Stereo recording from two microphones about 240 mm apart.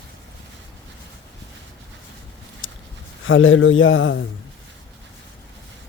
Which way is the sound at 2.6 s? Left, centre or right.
Left.